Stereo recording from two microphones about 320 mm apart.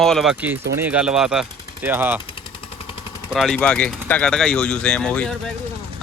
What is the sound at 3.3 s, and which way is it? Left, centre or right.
Speech, centre.